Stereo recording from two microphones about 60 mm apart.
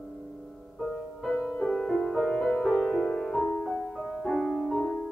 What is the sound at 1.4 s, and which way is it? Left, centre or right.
Music, centre.